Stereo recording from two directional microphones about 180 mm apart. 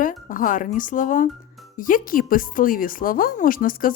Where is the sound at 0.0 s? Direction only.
50° left (ahead or behind).